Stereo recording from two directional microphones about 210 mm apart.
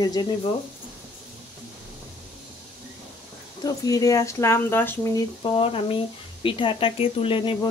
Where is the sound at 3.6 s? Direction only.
15° left (ahead or behind).